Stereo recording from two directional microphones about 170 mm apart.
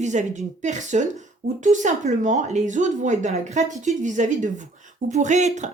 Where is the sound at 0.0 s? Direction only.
45° right (ahead or behind).